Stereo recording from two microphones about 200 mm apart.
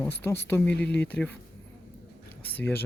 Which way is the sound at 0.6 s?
60° left (ahead or behind).